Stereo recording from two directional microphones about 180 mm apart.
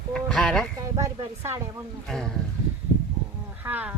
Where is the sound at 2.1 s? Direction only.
Centre (ahead or behind).